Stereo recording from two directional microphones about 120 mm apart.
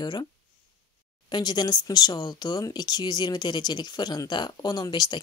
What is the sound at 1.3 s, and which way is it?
Speech, 35° left (ahead or behind).